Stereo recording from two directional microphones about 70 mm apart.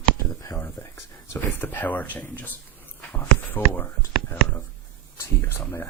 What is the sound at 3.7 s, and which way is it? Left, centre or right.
Speech, left.